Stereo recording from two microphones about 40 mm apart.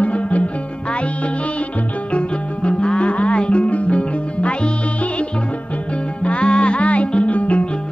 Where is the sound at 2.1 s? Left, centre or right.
Left.